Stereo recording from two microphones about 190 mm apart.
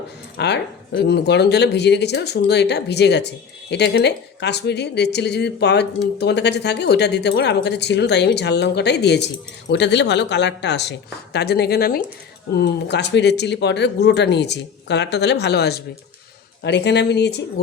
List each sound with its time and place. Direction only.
0.3 s speech: 65° left (ahead or behind)
12.9 s speech: 65° left (ahead or behind)